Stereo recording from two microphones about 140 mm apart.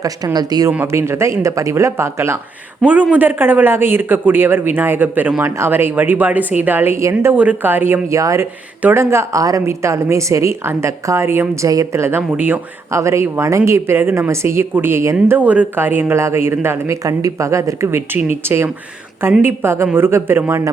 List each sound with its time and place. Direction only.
0.0 s a woman's voice: 25° right (ahead or behind)
0.7 s a woman's voice: 15° right (ahead or behind)